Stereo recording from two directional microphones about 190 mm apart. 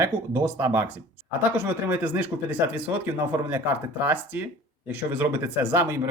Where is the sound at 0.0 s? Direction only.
15° right (ahead or behind).